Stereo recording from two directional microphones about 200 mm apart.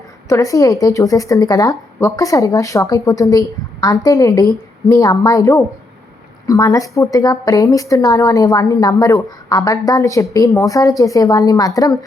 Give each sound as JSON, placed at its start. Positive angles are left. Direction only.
{"t": 0.3, "sound": "a woman's voice", "side_deg": 15}